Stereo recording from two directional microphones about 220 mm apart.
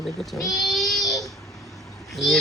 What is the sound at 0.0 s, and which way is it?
Speech, centre (ahead or behind).